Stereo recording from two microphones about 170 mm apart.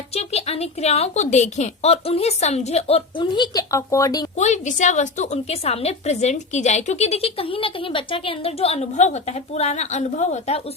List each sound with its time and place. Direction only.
0.1 s a woman's voice: 35° left (ahead or behind); by 4.3 s 20° left (ahead or behind)
4.4 s a woman's voice: 45° left (ahead or behind)